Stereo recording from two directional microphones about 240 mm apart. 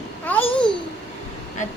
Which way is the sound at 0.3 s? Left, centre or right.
Centre.